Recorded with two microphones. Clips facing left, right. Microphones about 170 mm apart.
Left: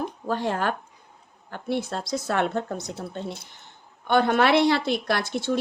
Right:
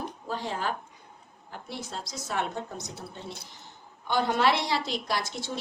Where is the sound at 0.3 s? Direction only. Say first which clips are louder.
Left 6 dB; 60° left (ahead or behind).